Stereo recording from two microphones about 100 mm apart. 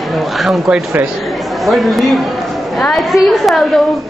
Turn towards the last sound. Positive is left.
turn(degrees=0)  # may be behind; listen again after turning